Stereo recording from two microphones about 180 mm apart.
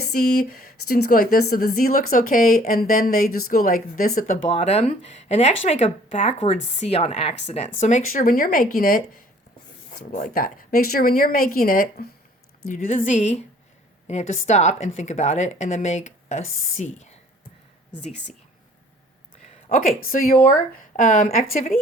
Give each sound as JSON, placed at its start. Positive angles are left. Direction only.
{"t": 0.1, "sound": "speech", "side_deg": 55}
{"t": 4.4, "sound": "a woman's voice", "side_deg": 35}
{"t": 10.1, "sound": "a woman's voice", "side_deg": 50}
{"t": 20.1, "sound": "speech", "side_deg": 50}